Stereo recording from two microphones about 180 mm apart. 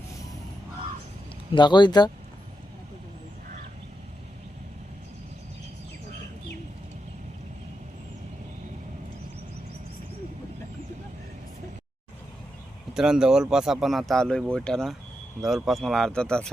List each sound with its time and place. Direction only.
1.5 s speech: 25° left (ahead or behind)
12.9 s speech: 5° right (ahead or behind)